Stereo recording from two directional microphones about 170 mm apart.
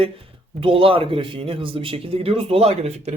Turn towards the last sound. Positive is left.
turn(degrees=-40)  # may be behind; listen again after turning